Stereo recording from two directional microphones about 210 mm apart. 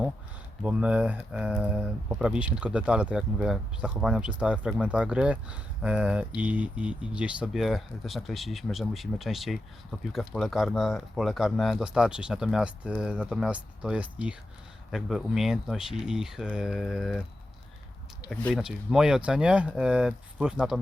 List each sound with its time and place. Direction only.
0.6 s speech: 5° right (ahead or behind)
18.3 s speech: centre (ahead or behind)